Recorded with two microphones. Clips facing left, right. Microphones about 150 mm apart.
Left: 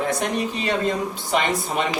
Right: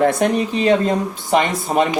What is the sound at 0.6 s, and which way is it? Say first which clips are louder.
A man's voice: right 8 dB; 45° right (ahead or behind).